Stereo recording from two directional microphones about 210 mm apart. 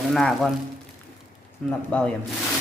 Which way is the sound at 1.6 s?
5° left (ahead or behind).